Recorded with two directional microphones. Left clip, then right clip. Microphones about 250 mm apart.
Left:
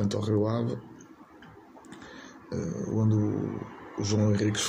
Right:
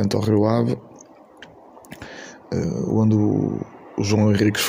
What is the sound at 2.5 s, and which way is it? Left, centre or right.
Speech, right.